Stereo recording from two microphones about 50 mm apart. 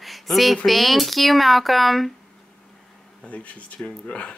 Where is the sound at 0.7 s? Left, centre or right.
Centre.